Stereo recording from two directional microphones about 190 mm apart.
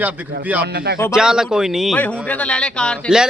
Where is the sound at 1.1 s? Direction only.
5° right (ahead or behind).